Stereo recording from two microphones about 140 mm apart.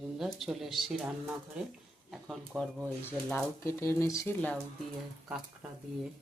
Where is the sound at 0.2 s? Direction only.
Centre (ahead or behind).